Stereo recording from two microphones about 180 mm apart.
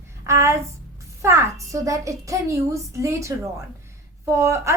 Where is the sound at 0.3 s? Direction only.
15° right (ahead or behind).